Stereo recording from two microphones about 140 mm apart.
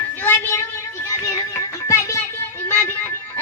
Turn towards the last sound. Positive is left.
turn(degrees=15)  # may be behind; listen again after turning